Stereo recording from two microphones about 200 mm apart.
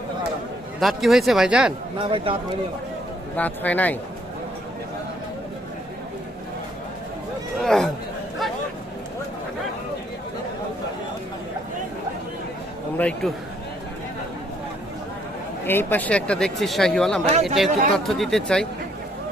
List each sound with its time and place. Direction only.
0.8 s speech: centre (ahead or behind)
2.0 s speech: 25° right (ahead or behind)
3.3 s a man's voice: 10° left (ahead or behind)
7.6 s speech: centre (ahead or behind)
13.0 s a man's voice: 5° left (ahead or behind)
15.6 s speech: 10° left (ahead or behind)